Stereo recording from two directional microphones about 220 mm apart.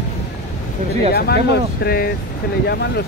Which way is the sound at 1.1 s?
45° left (ahead or behind).